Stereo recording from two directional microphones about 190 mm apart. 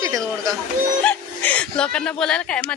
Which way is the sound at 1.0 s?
5° left (ahead or behind).